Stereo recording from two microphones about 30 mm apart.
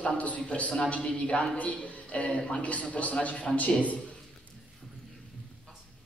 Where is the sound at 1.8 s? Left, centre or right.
Left.